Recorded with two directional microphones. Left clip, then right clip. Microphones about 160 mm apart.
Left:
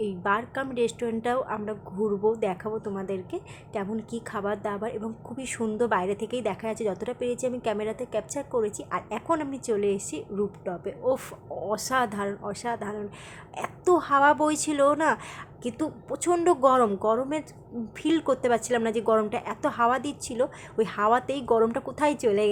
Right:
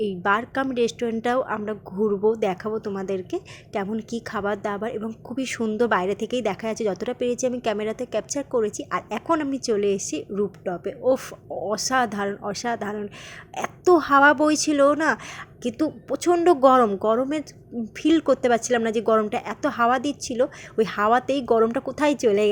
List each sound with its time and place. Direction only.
0.0 s a woman's voice: 30° right (ahead or behind)